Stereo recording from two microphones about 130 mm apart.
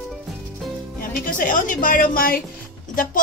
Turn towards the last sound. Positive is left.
turn(degrees=90)